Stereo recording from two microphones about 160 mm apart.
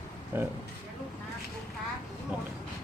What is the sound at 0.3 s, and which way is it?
Speech, 15° right (ahead or behind).